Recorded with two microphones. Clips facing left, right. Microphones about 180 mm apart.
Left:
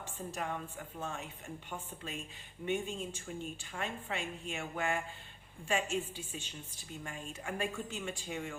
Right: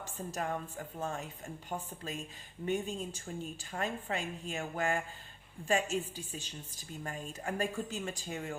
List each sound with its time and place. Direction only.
0.0 s a woman's voice: 40° right (ahead or behind)